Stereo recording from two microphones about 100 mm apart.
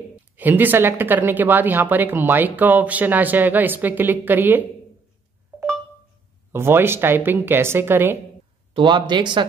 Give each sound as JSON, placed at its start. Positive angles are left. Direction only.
{"t": 0.1, "sound": "speech", "side_deg": -20}
{"t": 6.5, "sound": "speech", "side_deg": -25}
{"t": 8.7, "sound": "speech", "side_deg": -50}